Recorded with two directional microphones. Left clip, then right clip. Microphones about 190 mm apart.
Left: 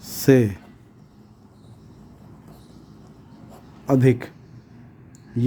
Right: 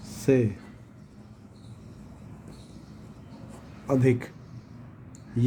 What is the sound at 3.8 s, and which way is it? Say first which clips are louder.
Speech: left 5 dB; 40° left (ahead or behind).